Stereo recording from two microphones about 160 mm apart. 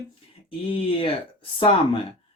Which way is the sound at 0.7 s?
35° left (ahead or behind).